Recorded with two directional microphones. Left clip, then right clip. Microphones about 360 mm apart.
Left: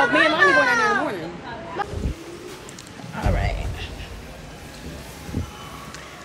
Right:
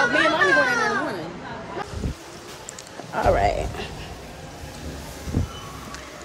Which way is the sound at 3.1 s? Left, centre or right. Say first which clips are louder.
Right 8 dB; centre.